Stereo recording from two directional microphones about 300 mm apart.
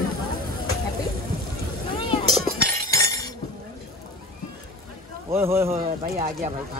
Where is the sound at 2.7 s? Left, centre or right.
Centre.